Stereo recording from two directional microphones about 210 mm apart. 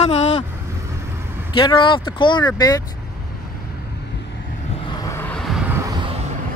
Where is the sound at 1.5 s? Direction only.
25° left (ahead or behind).